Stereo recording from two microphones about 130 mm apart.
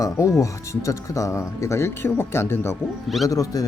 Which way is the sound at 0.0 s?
25° left (ahead or behind).